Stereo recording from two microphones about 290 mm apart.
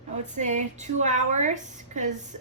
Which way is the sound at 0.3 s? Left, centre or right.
Right.